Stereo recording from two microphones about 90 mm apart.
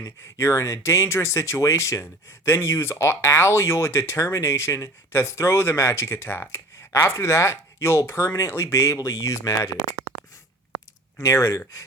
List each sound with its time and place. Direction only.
0.0 s speech: 35° left (ahead or behind)
11.2 s speech: 35° left (ahead or behind)